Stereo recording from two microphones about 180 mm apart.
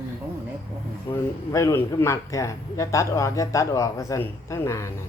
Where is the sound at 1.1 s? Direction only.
20° left (ahead or behind).